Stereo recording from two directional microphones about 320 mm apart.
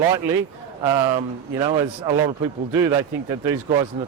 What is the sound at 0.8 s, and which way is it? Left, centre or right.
A man's voice, centre.